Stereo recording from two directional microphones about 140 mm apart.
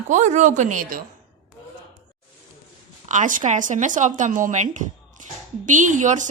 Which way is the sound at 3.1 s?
65° right (ahead or behind).